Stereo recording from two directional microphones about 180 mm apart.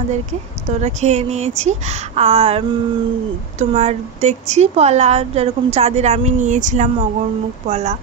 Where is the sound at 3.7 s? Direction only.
40° right (ahead or behind).